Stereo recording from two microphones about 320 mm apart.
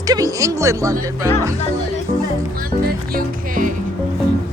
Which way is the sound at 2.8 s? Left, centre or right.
Right.